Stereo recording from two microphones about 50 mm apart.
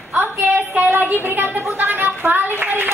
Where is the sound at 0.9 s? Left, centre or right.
Right.